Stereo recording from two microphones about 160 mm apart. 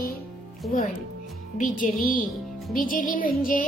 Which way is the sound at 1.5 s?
55° left (ahead or behind).